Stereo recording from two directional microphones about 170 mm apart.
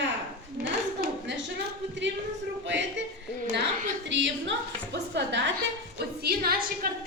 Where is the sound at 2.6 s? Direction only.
90° right.